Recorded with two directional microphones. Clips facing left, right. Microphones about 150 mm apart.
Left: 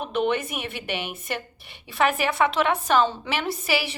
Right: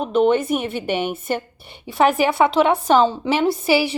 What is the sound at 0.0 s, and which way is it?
A woman's voice, 40° right (ahead or behind).